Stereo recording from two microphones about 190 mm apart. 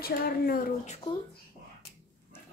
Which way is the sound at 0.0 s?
50° left (ahead or behind).